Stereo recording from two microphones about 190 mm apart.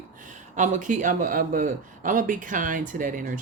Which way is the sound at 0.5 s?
40° right (ahead or behind).